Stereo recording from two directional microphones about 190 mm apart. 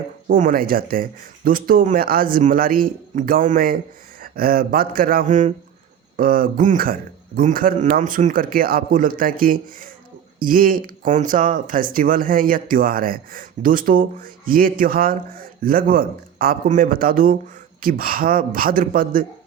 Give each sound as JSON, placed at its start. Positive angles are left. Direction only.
{"t": 0.3, "sound": "speech", "side_deg": -45}